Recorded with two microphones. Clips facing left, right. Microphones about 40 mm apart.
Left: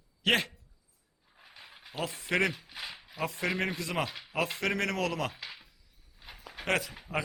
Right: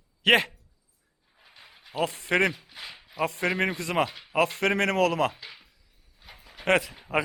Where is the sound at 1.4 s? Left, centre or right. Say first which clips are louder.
Even; centre.